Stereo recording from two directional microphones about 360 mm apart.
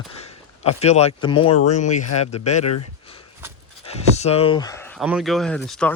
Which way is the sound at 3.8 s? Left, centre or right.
Centre.